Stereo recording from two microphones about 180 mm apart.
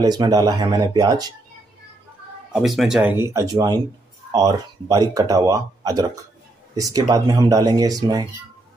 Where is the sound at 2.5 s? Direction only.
5° right (ahead or behind).